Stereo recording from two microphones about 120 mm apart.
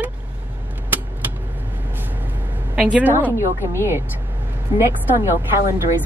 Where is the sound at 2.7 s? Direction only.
10° right (ahead or behind).